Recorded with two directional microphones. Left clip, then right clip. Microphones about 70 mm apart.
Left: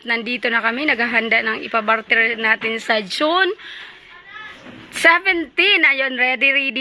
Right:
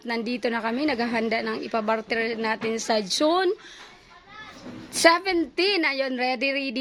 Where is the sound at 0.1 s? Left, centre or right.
Right.